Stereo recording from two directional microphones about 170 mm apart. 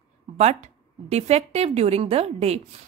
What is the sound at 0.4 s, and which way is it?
Speech, 40° right (ahead or behind).